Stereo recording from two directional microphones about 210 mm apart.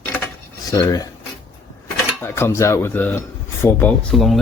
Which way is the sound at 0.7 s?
15° left (ahead or behind).